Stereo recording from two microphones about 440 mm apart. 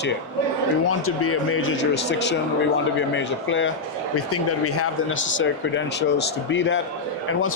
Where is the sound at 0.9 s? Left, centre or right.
Left.